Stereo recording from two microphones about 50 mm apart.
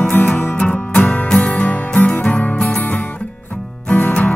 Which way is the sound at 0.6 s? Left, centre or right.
Centre.